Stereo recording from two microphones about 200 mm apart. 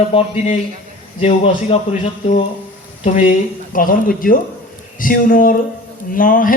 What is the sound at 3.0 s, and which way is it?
A man's voice, 35° left (ahead or behind).